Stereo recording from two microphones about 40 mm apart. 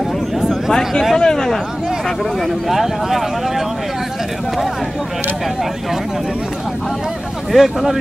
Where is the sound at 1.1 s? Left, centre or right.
Centre.